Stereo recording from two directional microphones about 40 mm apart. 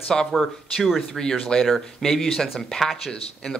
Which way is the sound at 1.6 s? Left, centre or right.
Centre.